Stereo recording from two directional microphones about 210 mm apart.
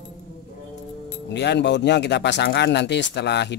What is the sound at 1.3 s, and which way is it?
Speech, 55° left (ahead or behind).